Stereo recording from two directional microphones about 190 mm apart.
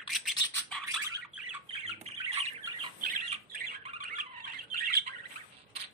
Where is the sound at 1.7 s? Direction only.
30° right (ahead or behind).